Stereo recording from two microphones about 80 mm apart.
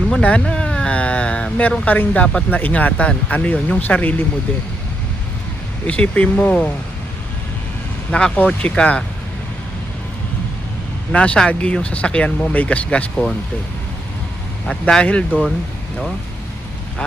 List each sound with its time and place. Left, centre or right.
0.1 s a sound: centre
1.8 s speech: centre
5.9 s speech: centre
8.1 s speech: centre
11.1 s speech: centre
14.7 s speech: centre